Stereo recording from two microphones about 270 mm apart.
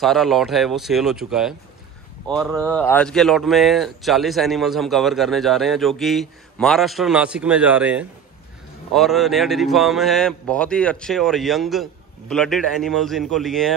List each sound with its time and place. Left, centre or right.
0.0 s speech: centre